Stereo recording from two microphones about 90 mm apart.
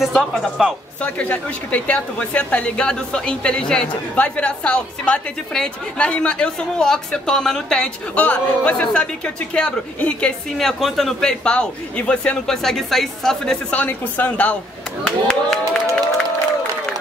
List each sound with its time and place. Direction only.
0.0 s a man's voice: centre (ahead or behind)
1.0 s a woman's voice: 15° left (ahead or behind)
10.6 s a man's voice: centre (ahead or behind)
13.7 s a woman's voice: 20° left (ahead or behind)